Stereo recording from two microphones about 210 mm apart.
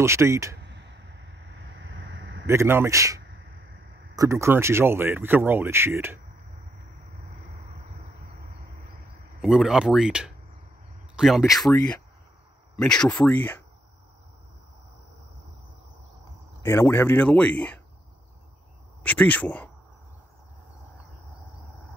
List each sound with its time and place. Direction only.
0.0 s speech: 15° right (ahead or behind)
0.6 s a sound: 55° right (ahead or behind)
2.4 s speech: 10° right (ahead or behind)
3.2 s sneeze: 50° right (ahead or behind)
4.1 s speech: 15° right (ahead or behind)
7.1 s vehicle: 30° right (ahead or behind)
9.4 s speech: centre (ahead or behind)
12.7 s speech: 5° left (ahead or behind)
16.6 s speech: 10° left (ahead or behind)
19.0 s speech: 5° left (ahead or behind)